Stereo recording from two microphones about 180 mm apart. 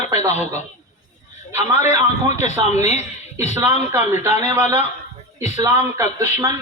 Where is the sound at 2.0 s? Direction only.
40° left (ahead or behind).